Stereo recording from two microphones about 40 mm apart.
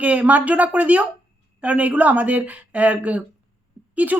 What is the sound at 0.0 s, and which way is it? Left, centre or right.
Speech, right.